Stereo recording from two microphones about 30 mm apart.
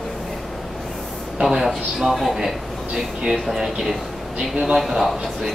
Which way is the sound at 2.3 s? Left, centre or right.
Centre.